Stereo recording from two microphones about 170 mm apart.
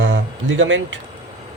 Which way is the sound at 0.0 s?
90° right.